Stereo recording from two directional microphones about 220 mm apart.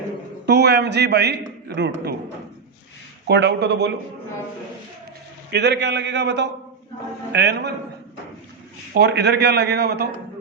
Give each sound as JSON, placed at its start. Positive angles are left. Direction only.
{"t": 0.4, "sound": "a man's voice", "side_deg": -50}
{"t": 3.2, "sound": "a man's voice", "side_deg": -50}
{"t": 5.5, "sound": "a man's voice", "side_deg": -50}
{"t": 9.0, "sound": "a man's voice", "side_deg": -50}